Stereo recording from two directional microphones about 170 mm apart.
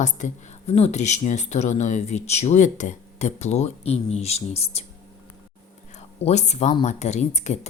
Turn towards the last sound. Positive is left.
turn(degrees=45)  # may be behind; listen again after turning